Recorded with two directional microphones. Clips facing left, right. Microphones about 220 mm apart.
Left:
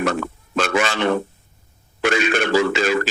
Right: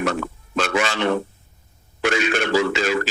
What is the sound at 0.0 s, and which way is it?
A man's voice, 50° left (ahead or behind).